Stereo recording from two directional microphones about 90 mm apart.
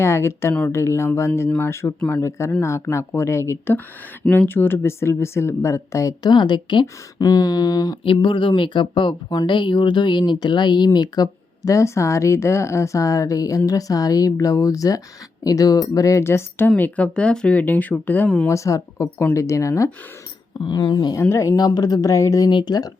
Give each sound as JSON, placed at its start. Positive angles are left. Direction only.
{"t": 0.0, "sound": "speech", "side_deg": 30}
{"t": 6.2, "sound": "speech", "side_deg": 55}
{"t": 7.2, "sound": "speech", "side_deg": 45}
{"t": 8.0, "sound": "speech", "side_deg": 80}
{"t": 18.4, "sound": "speech", "side_deg": 35}
{"t": 20.7, "sound": "speech", "side_deg": 55}
{"t": 21.2, "sound": "speech", "side_deg": 30}
{"t": 22.4, "sound": "speech", "side_deg": 55}